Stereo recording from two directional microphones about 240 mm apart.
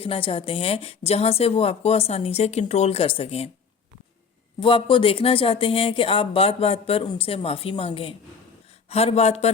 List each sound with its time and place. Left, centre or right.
0.0 s a woman's voice: left
4.6 s a woman's voice: left